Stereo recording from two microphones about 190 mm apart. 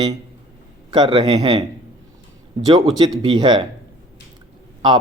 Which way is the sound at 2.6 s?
20° right (ahead or behind).